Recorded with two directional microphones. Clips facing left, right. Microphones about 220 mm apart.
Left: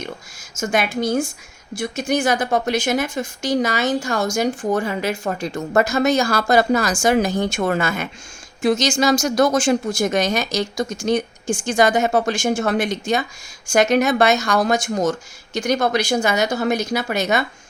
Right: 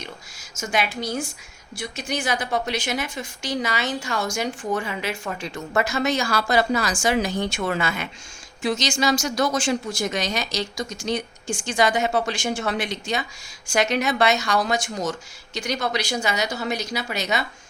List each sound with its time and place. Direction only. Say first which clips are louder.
0.6 s speech: left 5 dB; 45° left (ahead or behind)